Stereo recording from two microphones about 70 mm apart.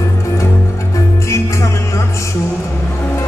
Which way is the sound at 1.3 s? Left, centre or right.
Left.